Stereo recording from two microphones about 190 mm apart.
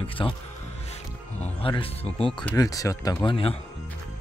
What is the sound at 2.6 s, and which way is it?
Speech, 20° left (ahead or behind).